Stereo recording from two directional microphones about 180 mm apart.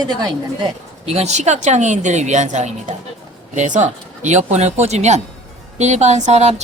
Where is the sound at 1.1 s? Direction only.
40° right (ahead or behind).